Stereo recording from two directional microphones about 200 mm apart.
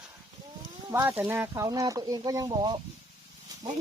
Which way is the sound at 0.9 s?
10° right (ahead or behind).